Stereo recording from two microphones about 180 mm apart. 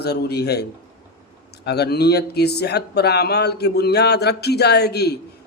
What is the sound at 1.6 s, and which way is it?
Speech, 65° left (ahead or behind).